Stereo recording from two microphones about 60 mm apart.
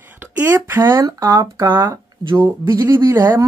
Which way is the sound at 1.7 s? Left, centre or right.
Right.